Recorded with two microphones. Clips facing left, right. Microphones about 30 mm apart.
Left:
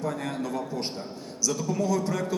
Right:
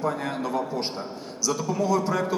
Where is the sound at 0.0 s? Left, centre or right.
Centre.